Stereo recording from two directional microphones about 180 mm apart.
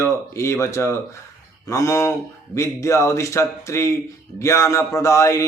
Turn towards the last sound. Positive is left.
turn(degrees=15)  # may be behind; listen again after turning